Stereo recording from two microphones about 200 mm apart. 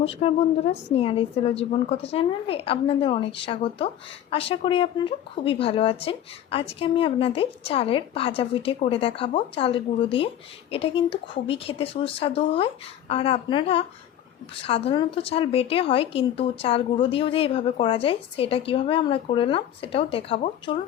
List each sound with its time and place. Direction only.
0.0 s a woman's voice: 30° left (ahead or behind)